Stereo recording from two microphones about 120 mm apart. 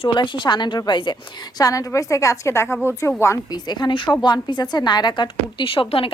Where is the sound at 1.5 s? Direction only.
30° left (ahead or behind).